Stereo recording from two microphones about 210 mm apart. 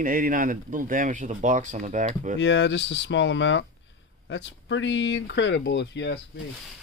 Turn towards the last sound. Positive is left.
turn(degrees=55)  # may be behind; listen again after turning